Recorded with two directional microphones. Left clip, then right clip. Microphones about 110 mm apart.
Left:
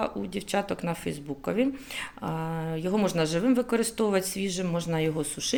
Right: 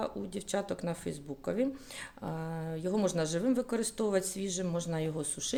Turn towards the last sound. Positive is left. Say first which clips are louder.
# left 7 dB
turn(degrees=-30)  # may be behind; listen again after turning